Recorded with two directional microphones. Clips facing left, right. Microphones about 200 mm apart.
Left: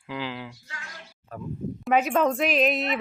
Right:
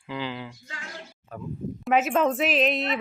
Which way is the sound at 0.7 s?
30° right (ahead or behind).